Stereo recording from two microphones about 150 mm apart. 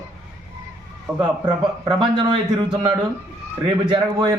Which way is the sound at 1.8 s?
30° right (ahead or behind).